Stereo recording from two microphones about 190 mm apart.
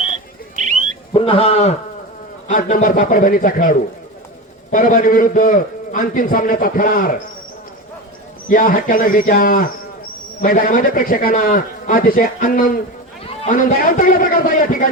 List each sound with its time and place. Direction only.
0.5 s bird: 40° right (ahead or behind)
1.1 s a man's voice: 30° left (ahead or behind)
2.5 s a man's voice: 45° left (ahead or behind)
8.4 s a man's voice: 45° left (ahead or behind)